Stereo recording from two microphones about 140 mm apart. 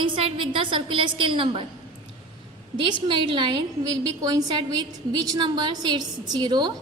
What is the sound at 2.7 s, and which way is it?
A woman's voice, 35° right (ahead or behind).